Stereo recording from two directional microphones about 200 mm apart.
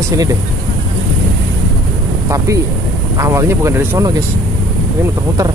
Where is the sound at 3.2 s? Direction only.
15° right (ahead or behind).